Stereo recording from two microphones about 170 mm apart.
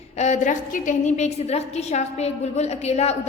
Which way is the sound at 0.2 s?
45° left (ahead or behind).